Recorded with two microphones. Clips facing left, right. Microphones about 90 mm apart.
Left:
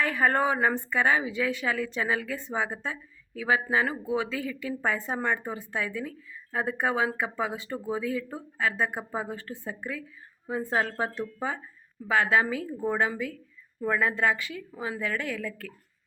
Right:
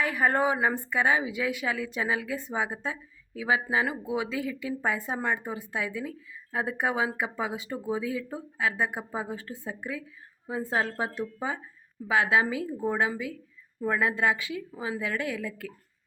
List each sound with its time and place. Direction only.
0.0 s speech: 10° right (ahead or behind)